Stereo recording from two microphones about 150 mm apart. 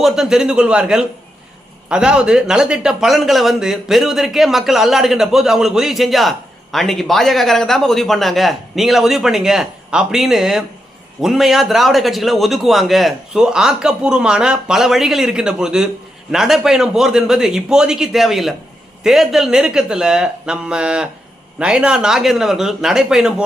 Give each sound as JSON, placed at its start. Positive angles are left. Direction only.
{"t": 0.0, "sound": "speech", "side_deg": -5}